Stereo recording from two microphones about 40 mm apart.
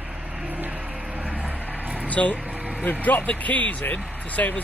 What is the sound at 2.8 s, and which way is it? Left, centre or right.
Speech, left.